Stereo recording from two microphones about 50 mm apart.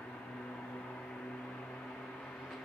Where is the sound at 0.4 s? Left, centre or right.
Centre.